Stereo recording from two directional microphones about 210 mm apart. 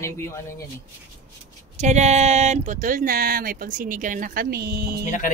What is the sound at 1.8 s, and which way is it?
Speech, 35° right (ahead or behind).